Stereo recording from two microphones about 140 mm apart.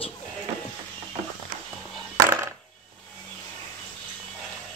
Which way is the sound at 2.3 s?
15° right (ahead or behind).